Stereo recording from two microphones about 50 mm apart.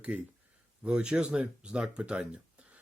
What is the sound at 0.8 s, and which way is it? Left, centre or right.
Speech, centre.